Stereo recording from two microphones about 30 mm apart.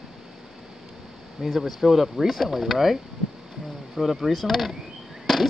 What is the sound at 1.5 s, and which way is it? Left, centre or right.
Speech, centre.